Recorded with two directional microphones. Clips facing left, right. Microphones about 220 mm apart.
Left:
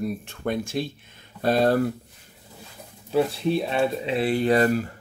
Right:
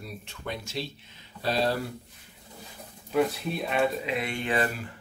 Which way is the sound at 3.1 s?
30° left (ahead or behind).